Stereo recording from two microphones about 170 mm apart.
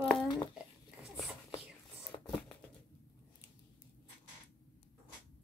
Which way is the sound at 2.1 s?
30° left (ahead or behind).